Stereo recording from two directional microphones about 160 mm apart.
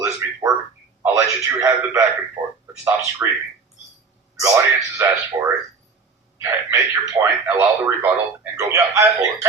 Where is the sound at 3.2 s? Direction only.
15° right (ahead or behind).